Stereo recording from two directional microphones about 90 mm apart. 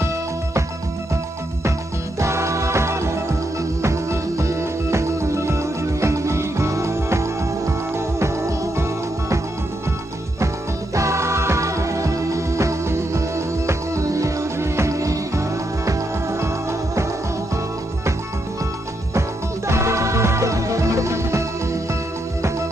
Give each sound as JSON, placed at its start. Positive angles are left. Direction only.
{"t": 2.1, "sound": "music", "side_deg": -30}
{"t": 11.0, "sound": "music", "side_deg": -35}
{"t": 19.7, "sound": "music", "side_deg": -35}